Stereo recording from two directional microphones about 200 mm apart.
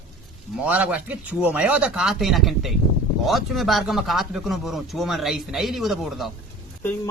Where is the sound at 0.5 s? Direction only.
5° right (ahead or behind).